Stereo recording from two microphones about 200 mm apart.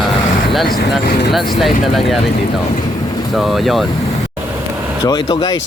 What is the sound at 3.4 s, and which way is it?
Speech, centre (ahead or behind).